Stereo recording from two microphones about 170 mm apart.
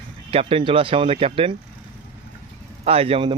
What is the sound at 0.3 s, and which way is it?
Speech, 35° right (ahead or behind).